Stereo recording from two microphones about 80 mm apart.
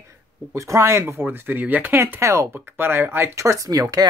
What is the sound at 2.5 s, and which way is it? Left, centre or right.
Speech, right.